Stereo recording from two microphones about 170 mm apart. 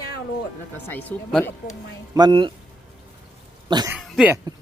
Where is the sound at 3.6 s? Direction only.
25° right (ahead or behind).